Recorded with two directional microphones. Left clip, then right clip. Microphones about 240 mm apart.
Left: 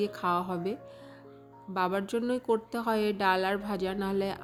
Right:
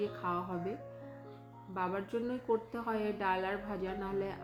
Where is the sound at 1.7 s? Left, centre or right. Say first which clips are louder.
Left 7 dB; left.